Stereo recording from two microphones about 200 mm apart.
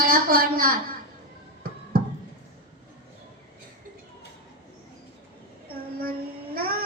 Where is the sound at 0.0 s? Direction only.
45° right (ahead or behind).